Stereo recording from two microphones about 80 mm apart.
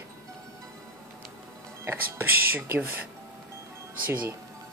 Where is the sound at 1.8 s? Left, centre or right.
Right.